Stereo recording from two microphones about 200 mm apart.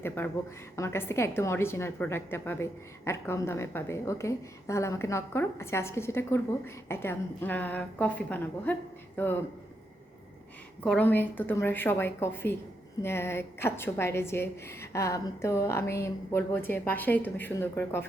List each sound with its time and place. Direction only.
0.8 s a woman's voice: 10° left (ahead or behind)
10.8 s a woman's voice: 10° left (ahead or behind)